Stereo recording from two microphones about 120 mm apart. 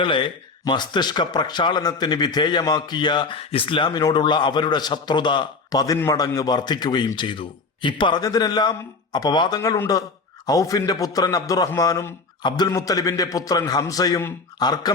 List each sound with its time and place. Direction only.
0.0 s a man's voice: 40° left (ahead or behind)